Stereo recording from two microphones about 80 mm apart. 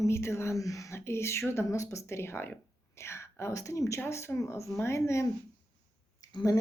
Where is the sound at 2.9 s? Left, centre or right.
Left.